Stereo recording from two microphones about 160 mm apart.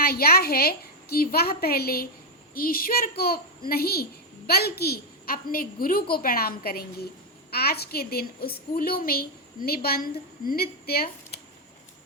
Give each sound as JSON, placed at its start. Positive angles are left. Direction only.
{"t": 0.0, "sound": "a woman's voice", "side_deg": 70}